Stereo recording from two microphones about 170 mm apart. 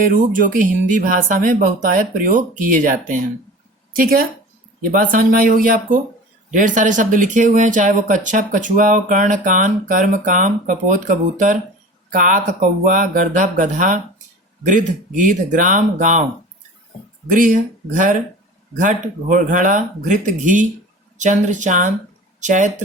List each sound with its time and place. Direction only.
0.0 s a woman's voice: 55° right (ahead or behind)
17.2 s speech: 50° right (ahead or behind)